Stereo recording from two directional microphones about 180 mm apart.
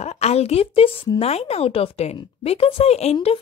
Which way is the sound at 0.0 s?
35° left (ahead or behind).